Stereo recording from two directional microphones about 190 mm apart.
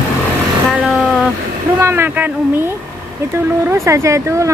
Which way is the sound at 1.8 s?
10° right (ahead or behind).